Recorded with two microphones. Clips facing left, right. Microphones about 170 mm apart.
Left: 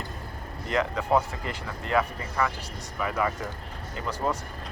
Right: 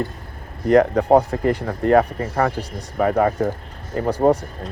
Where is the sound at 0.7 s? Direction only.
60° right (ahead or behind).